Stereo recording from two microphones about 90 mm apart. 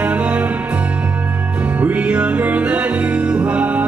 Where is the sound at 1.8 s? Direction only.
15° right (ahead or behind).